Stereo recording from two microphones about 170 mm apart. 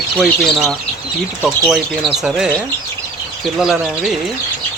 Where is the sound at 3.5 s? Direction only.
5° right (ahead or behind).